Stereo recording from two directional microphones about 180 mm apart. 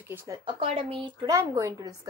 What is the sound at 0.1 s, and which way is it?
Speech, 15° right (ahead or behind).